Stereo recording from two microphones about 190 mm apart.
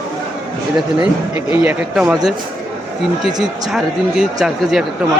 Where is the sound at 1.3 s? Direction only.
10° right (ahead or behind).